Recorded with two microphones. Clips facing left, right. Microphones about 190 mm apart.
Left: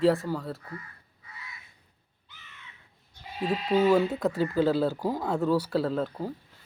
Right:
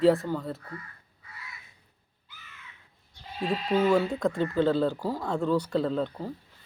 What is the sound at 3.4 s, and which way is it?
Speech, 5° left (ahead or behind).